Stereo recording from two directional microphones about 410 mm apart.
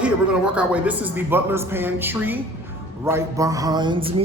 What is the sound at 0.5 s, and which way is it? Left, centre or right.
A man's voice, centre.